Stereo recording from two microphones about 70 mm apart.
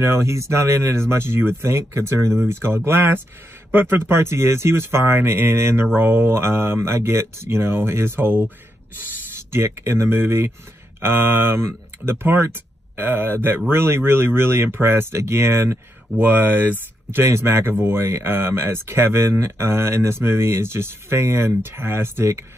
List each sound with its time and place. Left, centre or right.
0.0 s speech: right
9.5 s speech: right
16.2 s speech: right